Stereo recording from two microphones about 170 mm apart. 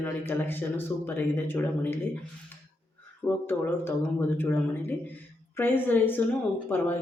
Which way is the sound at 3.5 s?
10° left (ahead or behind).